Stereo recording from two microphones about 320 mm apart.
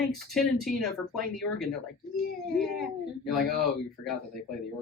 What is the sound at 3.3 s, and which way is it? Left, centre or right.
Speech, centre.